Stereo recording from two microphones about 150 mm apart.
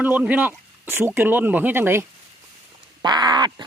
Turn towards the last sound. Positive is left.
turn(degrees=-30)  # may be behind; listen again after turning